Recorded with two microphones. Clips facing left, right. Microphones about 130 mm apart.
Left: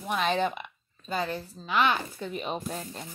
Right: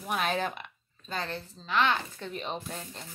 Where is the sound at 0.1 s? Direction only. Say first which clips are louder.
Left 3 dB; 5° right (ahead or behind).